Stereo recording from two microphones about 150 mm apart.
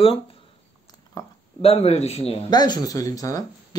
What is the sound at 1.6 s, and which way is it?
Speech, 45° left (ahead or behind).